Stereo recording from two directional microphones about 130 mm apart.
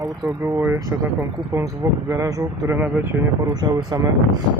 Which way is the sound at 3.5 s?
30° right (ahead or behind).